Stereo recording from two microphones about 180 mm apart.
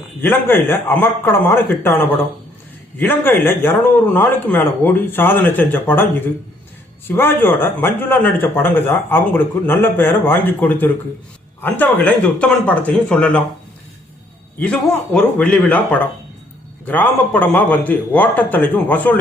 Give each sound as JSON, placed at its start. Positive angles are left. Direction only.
{"t": 0.2, "sound": "speech", "side_deg": 10}
{"t": 14.6, "sound": "speech", "side_deg": 5}